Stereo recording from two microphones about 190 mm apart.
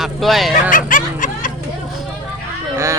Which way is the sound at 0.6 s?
45° left (ahead or behind).